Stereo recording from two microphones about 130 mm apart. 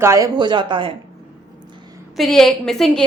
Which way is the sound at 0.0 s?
20° right (ahead or behind).